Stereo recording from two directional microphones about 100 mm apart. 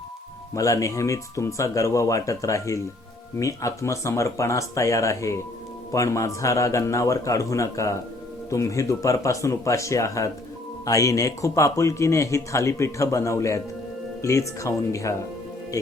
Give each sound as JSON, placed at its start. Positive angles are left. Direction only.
{"t": 0.5, "sound": "a man's voice", "side_deg": 30}